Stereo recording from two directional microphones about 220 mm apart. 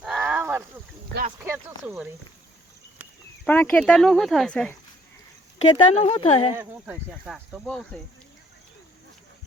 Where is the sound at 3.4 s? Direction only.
5° left (ahead or behind).